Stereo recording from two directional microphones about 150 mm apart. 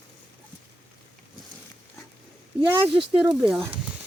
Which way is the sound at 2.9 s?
35° right (ahead or behind).